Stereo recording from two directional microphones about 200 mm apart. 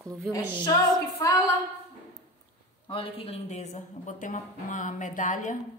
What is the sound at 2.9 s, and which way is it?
A woman's voice, 25° left (ahead or behind).